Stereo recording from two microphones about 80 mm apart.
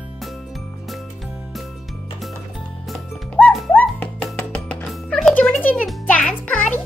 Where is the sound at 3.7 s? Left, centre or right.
Centre.